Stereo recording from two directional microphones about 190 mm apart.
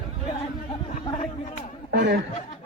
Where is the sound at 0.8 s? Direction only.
35° left (ahead or behind).